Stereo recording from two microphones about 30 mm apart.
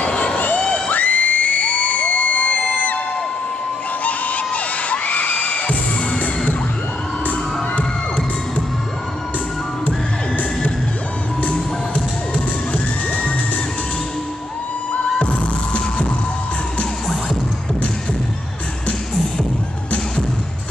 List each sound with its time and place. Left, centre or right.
0.8 s crowd: left
4.8 s music: left
11.4 s music: left